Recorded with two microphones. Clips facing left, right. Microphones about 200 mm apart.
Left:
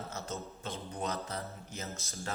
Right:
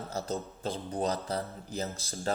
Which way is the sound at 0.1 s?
35° right (ahead or behind).